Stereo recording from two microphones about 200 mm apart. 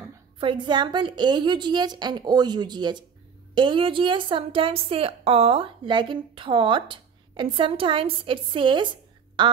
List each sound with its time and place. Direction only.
0.4 s a woman's voice: 25° right (ahead or behind)